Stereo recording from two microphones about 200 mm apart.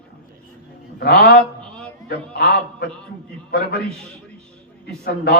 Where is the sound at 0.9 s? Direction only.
50° left (ahead or behind).